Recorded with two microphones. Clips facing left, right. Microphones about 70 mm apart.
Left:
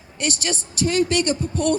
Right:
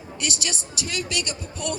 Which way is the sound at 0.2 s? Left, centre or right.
Left.